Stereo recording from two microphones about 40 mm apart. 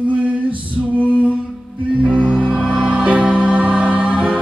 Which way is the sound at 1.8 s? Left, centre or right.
Right.